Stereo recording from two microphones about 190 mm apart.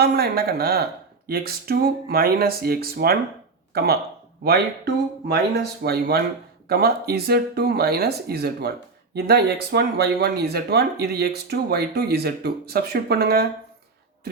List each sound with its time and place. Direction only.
0.0 s speech: 55° right (ahead or behind)